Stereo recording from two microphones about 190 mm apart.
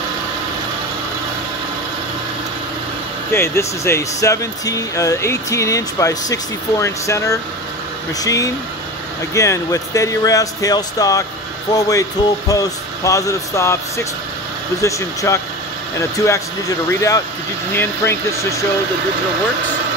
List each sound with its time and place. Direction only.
3.3 s speech: 15° left (ahead or behind)